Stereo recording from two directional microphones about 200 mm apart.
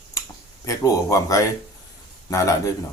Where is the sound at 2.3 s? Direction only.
15° left (ahead or behind).